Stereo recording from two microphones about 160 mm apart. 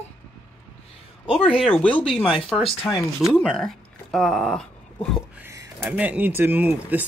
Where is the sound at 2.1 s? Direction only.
35° left (ahead or behind).